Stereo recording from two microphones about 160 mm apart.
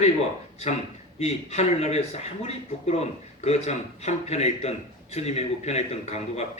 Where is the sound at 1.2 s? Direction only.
40° left (ahead or behind).